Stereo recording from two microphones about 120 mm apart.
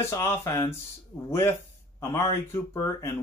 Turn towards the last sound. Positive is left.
turn(degrees=25)  # may be behind; listen again after turning